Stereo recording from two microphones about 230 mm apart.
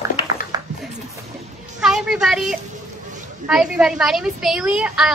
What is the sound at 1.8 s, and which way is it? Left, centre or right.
A woman's voice, centre.